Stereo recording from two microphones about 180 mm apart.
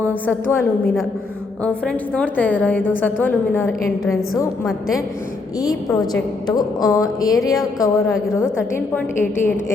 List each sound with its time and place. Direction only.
0.1 s a woman's voice: 10° left (ahead or behind)
5.5 s speech: 20° left (ahead or behind)
7.3 s speech: centre (ahead or behind)
7.6 s a woman's voice: 20° left (ahead or behind)